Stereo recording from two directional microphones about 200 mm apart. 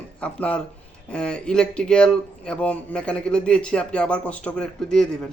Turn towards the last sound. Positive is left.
turn(degrees=5)  # may be behind; listen again after turning